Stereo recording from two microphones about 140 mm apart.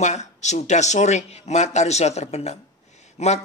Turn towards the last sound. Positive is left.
turn(degrees=50)  # may be behind; listen again after turning